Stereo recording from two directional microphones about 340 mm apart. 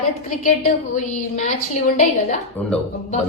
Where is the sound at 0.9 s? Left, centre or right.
Left.